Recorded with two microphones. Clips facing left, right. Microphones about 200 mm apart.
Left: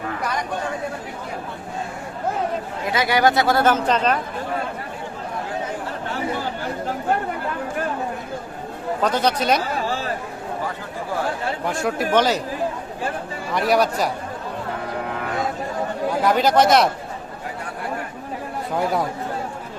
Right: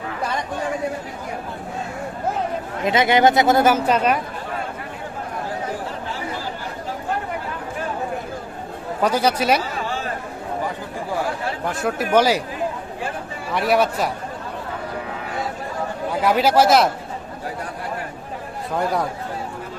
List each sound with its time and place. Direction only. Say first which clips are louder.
2.8 s speech: right 3 dB; 20° right (ahead or behind)
9.0 s speech: right 2 dB; 10° right (ahead or behind)
11.6 s speech: even; centre (ahead or behind)
13.5 s speech: even; centre (ahead or behind)
16.2 s speech: right 1 dB; 5° right (ahead or behind)
18.8 s speech: even; centre (ahead or behind)